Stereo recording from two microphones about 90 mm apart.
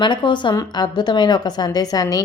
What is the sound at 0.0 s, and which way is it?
A woman's voice, 60° left (ahead or behind).